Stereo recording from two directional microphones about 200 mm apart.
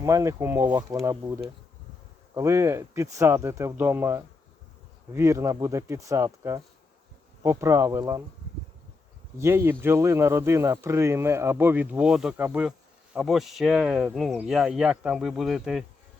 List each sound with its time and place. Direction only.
0.0 s speech: 15° right (ahead or behind)
9.4 s speech: 10° right (ahead or behind)